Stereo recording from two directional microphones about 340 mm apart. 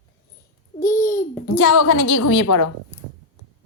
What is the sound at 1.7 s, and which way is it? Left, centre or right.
Speech, left.